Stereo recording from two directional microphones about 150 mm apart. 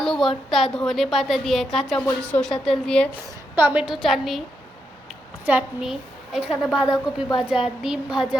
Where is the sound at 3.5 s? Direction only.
10° right (ahead or behind).